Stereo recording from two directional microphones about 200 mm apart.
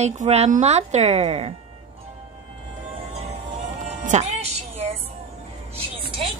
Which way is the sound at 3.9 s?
35° right (ahead or behind).